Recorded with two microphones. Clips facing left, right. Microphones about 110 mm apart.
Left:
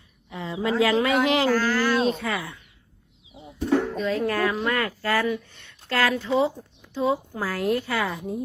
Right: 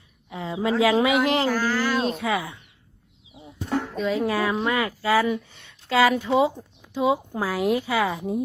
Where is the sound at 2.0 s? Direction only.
Centre (ahead or behind).